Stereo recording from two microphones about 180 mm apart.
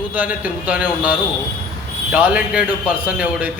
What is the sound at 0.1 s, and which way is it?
A man's voice, 10° right (ahead or behind).